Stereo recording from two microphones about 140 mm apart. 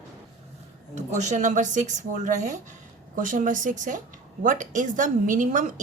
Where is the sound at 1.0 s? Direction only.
60° right (ahead or behind).